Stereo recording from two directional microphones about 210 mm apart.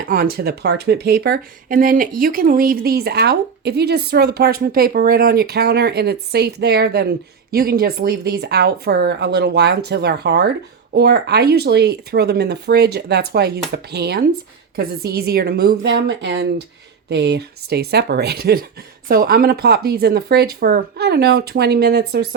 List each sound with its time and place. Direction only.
0.0 s speech: 45° right (ahead or behind)